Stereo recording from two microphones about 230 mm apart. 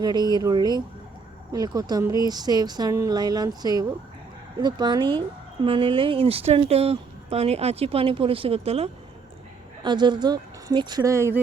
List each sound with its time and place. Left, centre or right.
0.0 s speech: centre